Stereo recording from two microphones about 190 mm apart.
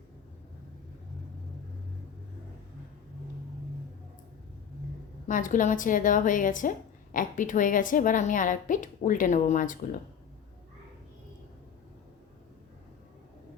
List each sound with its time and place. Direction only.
5.3 s a woman's voice: 45° left (ahead or behind)